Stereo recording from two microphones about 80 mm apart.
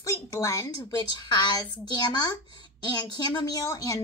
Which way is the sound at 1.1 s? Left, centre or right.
Left.